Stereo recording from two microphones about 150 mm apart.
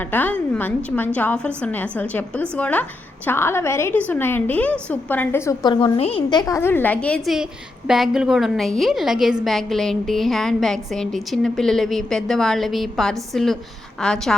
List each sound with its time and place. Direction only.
0.0 s a woman's voice: 10° left (ahead or behind)
5.6 s a woman's voice: 35° left (ahead or behind)
6.4 s a woman's voice: 20° left (ahead or behind)
7.9 s a woman's voice: 5° right (ahead or behind)